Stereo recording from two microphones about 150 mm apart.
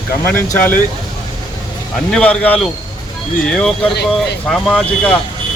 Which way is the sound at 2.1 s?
5° left (ahead or behind).